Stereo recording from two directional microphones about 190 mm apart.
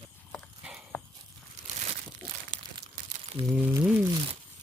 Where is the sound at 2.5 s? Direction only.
45° right (ahead or behind).